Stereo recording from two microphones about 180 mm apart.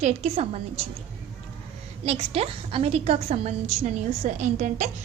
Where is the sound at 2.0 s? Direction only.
35° right (ahead or behind).